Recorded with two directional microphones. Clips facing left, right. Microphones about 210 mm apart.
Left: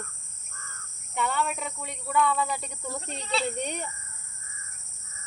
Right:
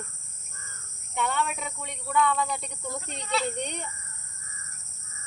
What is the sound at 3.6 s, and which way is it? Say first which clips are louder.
Speech: left 1 dB; 5° left (ahead or behind).